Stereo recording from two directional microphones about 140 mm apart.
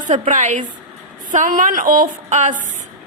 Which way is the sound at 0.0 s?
60° right (ahead or behind).